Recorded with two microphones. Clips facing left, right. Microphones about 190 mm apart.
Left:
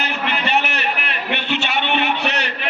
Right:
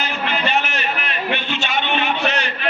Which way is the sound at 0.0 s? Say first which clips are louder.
Even; 65° left (ahead or behind).